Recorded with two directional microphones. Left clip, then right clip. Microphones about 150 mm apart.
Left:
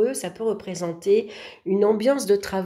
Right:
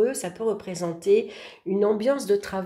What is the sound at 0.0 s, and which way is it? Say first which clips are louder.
Speech: left 1 dB; 15° left (ahead or behind).